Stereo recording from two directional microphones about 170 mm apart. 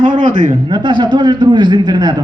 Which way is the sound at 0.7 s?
25° right (ahead or behind).